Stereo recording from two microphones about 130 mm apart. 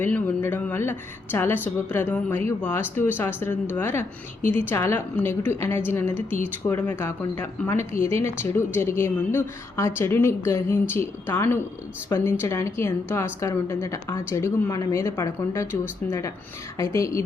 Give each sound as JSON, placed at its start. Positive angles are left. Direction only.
{"t": 0.0, "sound": "a woman's voice", "side_deg": 15}
{"t": 15.6, "sound": "speech", "side_deg": -10}
{"t": 16.0, "sound": "a woman's voice", "side_deg": 20}